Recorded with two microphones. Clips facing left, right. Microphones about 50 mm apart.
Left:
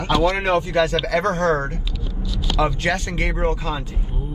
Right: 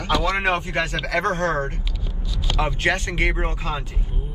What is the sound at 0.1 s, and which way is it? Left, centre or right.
A man's voice, right.